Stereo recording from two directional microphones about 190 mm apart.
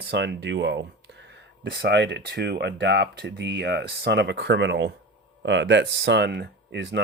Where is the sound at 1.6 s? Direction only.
60° right (ahead or behind).